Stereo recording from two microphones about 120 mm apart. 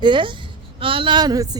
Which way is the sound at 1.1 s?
30° right (ahead or behind).